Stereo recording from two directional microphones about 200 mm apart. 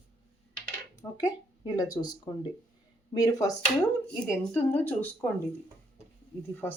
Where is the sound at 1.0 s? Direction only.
15° left (ahead or behind).